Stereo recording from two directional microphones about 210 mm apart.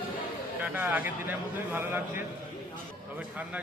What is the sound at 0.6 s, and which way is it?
Speech, 10° right (ahead or behind).